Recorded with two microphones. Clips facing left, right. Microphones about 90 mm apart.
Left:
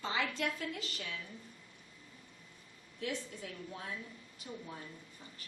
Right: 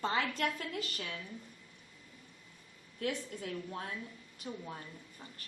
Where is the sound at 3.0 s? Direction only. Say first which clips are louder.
Right 3 dB; 50° right (ahead or behind).